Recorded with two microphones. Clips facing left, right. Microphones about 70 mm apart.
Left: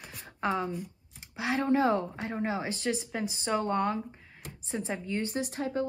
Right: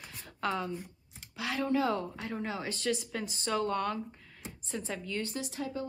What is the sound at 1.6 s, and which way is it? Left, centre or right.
Speech, left.